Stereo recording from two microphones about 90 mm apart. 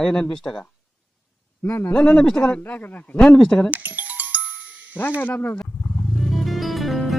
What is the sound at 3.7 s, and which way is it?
Music, 15° right (ahead or behind).